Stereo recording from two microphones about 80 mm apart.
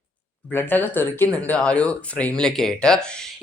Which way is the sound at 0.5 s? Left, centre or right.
Left.